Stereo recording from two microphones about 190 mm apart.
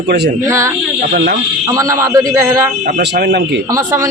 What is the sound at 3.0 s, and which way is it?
Speech, 60° right (ahead or behind).